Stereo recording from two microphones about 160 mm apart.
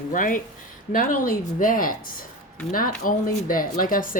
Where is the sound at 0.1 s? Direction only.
55° left (ahead or behind).